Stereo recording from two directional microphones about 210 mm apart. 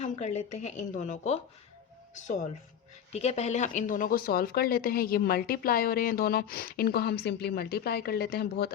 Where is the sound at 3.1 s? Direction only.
30° left (ahead or behind).